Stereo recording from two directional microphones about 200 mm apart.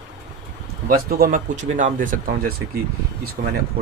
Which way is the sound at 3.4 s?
50° right (ahead or behind).